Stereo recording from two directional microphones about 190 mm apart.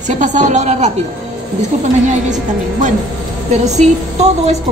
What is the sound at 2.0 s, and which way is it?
Speech, 40° right (ahead or behind).